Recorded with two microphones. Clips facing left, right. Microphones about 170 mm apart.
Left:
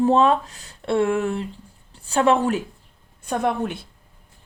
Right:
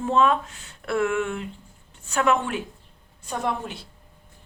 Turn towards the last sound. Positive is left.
turn(degrees=55)  # may be behind; listen again after turning